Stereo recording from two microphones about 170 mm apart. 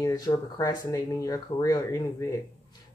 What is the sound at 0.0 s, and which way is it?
Speech, 20° left (ahead or behind).